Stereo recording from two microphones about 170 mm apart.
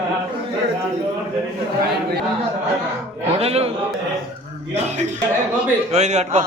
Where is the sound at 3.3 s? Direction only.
35° right (ahead or behind).